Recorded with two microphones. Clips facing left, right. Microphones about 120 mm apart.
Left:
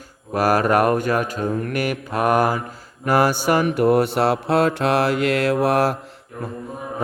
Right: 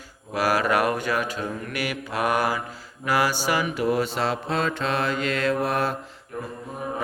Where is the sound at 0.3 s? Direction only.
50° left (ahead or behind); by 6.0 s 75° left (ahead or behind).